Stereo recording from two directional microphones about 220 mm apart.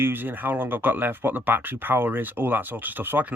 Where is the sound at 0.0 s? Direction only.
10° right (ahead or behind).